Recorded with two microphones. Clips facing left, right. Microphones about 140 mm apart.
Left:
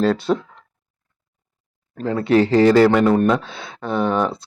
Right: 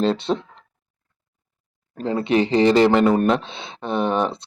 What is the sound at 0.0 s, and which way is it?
Speech, 25° right (ahead or behind).